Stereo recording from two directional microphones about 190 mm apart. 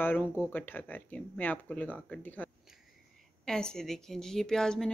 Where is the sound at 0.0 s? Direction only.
10° left (ahead or behind).